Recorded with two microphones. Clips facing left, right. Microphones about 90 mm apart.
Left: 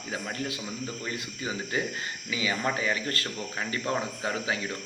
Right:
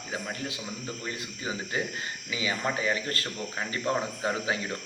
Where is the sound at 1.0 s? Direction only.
25° right (ahead or behind).